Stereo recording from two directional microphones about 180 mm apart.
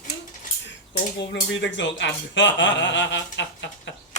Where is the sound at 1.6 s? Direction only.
90° left.